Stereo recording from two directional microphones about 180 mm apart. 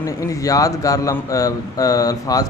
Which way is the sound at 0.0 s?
15° left (ahead or behind).